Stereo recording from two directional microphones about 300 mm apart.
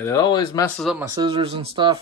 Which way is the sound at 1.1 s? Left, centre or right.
Centre.